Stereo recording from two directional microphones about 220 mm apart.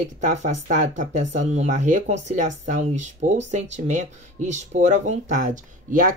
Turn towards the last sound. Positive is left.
turn(degrees=-40)  # may be behind; listen again after turning